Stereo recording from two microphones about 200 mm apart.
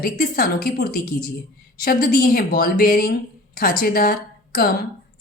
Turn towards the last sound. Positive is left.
turn(degrees=45)  # may be behind; listen again after turning